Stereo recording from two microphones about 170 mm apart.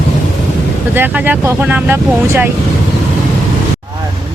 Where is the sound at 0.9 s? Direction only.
10° right (ahead or behind).